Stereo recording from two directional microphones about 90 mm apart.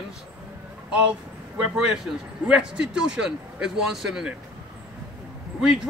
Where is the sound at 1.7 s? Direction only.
5° right (ahead or behind).